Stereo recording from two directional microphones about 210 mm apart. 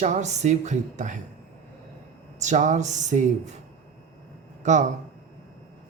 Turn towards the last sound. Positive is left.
turn(degrees=-35)  # may be behind; listen again after turning